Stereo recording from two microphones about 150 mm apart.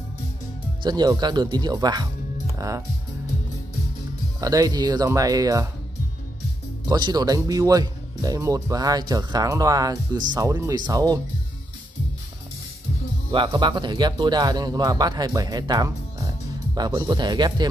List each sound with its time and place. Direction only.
0.8 s speech: 25° right (ahead or behind)
4.4 s speech: 25° right (ahead or behind)
6.9 s speech: 25° right (ahead or behind)
13.3 s speech: 30° right (ahead or behind)